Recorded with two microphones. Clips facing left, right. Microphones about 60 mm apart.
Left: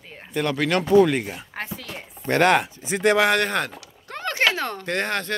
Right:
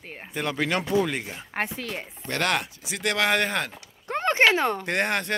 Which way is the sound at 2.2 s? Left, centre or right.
Left.